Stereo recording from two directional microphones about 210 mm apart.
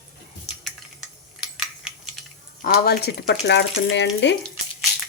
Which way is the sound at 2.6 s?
45° left (ahead or behind).